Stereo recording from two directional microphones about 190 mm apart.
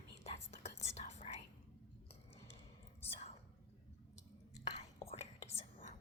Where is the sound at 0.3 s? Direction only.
35° left (ahead or behind).